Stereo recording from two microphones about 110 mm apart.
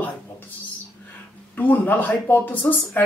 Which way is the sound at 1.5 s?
15° left (ahead or behind).